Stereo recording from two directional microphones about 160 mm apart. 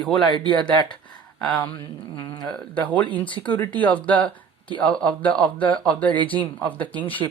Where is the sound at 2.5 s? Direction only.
10° left (ahead or behind).